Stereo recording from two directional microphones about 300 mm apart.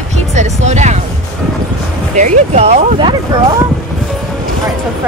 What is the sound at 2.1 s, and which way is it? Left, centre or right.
Speech, right.